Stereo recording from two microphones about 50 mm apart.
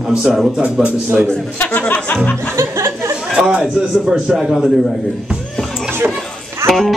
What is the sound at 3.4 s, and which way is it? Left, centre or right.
A man's voice, centre.